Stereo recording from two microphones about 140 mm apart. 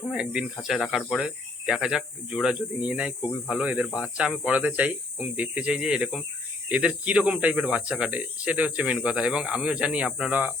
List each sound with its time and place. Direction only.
0.1 s speech: 5° right (ahead or behind)